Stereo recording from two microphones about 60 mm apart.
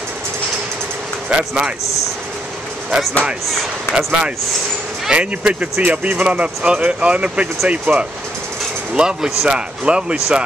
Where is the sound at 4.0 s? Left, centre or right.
Centre.